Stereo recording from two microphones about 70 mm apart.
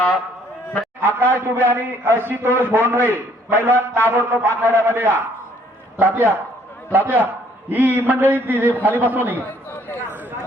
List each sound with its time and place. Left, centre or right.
1.0 s a man's voice: right
9.5 s chatter: left